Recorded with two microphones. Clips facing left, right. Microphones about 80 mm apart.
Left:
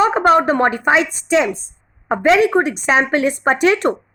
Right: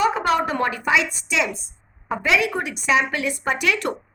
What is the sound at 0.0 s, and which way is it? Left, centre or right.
Speech, left.